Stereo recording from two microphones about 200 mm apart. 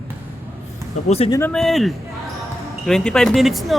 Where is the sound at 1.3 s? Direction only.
10° left (ahead or behind).